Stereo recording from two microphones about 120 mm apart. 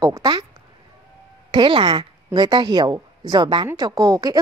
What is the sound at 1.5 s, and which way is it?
Speech, 40° right (ahead or behind).